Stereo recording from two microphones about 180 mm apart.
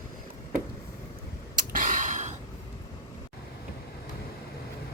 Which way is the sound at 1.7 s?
50° right (ahead or behind).